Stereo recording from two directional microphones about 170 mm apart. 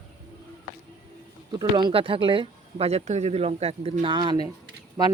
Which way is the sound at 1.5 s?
30° right (ahead or behind).